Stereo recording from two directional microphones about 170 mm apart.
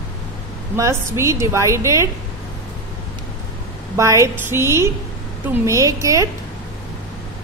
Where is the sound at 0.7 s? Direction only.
15° right (ahead or behind).